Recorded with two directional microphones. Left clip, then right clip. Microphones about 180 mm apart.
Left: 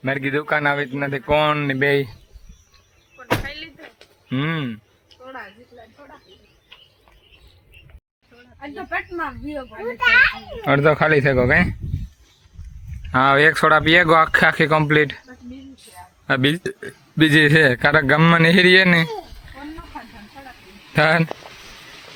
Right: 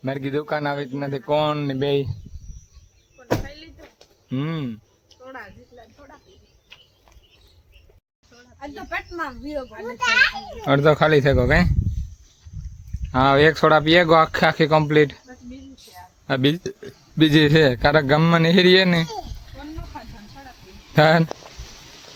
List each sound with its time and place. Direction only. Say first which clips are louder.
0.0 s a man's voice: left 4 dB; centre (ahead or behind)
1.8 s speech: left 3 dB; 20° left (ahead or behind)
3.2 s a sound: left 3 dB; 35° right (ahead or behind)
4.3 s a man's voice: left 4 dB; centre (ahead or behind)
5.2 s a sound: left 2 dB; 30° left (ahead or behind)
8.9 s speech: left 3 dB; 15° right (ahead or behind)
10.6 s a man's voice: left 1 dB; 5° right (ahead or behind)
13.1 s a man's voice: left 2 dB; 5° right (ahead or behind)
16.2 s a man's voice: left 2 dB; 5° right (ahead or behind)
20.9 s speech: right 1 dB; 20° right (ahead or behind)